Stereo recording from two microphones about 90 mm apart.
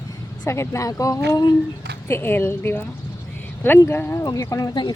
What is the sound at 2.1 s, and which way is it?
Speech, 25° left (ahead or behind).